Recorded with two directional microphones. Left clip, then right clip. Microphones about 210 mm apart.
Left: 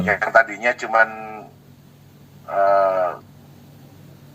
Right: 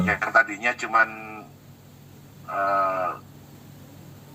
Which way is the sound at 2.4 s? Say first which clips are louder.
Left 7 dB; 45° left (ahead or behind).